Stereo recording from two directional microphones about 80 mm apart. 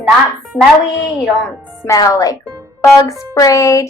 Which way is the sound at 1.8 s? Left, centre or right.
Left.